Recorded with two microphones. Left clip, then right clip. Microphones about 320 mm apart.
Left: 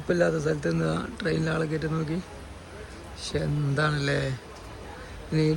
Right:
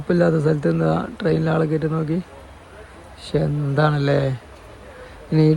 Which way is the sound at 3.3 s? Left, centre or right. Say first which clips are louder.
Right 8 dB; centre.